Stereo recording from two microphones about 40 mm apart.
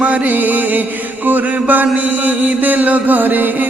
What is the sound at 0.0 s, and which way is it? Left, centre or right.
Music, right.